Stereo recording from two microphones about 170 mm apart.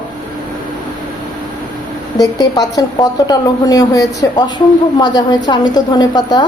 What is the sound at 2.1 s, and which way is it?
A woman's voice, 20° left (ahead or behind).